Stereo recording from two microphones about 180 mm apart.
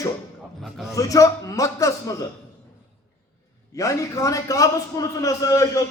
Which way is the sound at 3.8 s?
20° left (ahead or behind).